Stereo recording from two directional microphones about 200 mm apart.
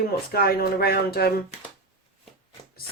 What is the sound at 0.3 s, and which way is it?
Speech, 50° left (ahead or behind).